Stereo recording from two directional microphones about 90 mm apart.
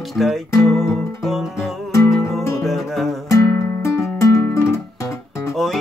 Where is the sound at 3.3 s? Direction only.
35° left (ahead or behind).